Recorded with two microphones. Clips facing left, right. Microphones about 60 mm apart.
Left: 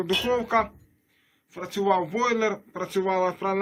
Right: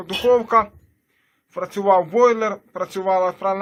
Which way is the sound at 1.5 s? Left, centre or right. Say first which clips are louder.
Right 7 dB; right.